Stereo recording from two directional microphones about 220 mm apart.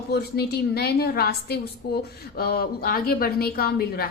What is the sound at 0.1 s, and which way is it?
A woman's voice, 45° left (ahead or behind).